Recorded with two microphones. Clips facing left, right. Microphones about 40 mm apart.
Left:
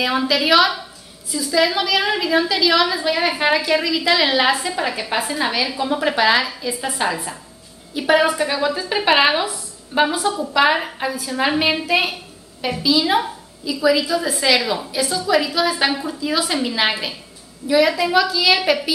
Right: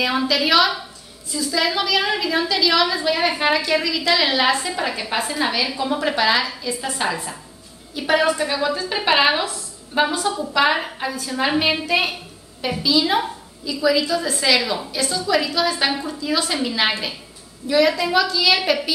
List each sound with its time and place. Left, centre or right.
0.0 s a woman's voice: centre